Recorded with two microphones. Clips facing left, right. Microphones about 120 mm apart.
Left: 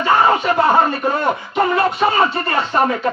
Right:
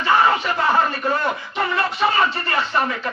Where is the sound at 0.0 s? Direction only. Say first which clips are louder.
Left 3 dB; 50° left (ahead or behind).